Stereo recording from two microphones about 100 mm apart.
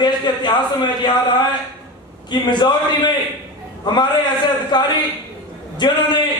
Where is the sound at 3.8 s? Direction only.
45° left (ahead or behind).